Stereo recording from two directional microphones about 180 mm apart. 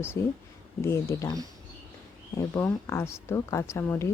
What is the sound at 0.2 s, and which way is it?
Speech, 15° left (ahead or behind).